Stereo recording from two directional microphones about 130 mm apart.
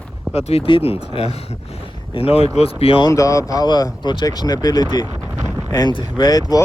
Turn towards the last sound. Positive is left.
turn(degrees=30)  # may be behind; listen again after turning